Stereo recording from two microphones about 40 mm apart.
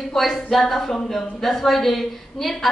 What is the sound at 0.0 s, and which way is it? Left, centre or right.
A woman's voice, centre.